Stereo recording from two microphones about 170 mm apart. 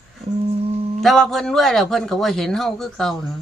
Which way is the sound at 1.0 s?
Centre (ahead or behind).